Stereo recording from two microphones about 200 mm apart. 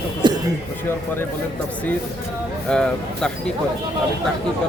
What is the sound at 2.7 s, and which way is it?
Speech, 5° left (ahead or behind).